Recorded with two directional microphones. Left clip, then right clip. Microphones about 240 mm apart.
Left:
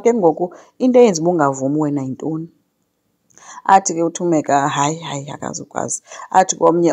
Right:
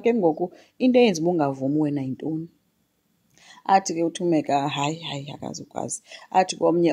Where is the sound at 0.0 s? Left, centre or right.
Centre.